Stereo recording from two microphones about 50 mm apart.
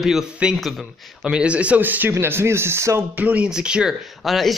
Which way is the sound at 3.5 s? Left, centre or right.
Centre.